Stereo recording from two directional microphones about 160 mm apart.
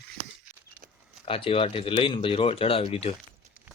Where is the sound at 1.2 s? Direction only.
35° left (ahead or behind).